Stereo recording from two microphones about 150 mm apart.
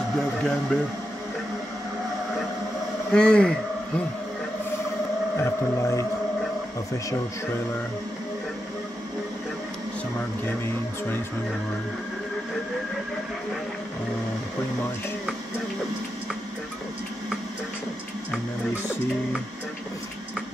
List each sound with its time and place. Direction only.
0.4 s speech: 5° left (ahead or behind)
3.1 s speech: 5° left (ahead or behind)
5.4 s speech: 20° left (ahead or behind)
10.4 s speech: 15° left (ahead or behind)